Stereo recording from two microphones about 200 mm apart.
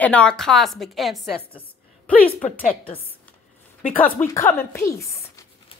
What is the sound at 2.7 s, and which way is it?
Speech, 30° left (ahead or behind).